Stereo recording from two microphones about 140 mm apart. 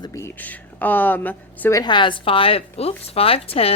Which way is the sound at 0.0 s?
20° left (ahead or behind).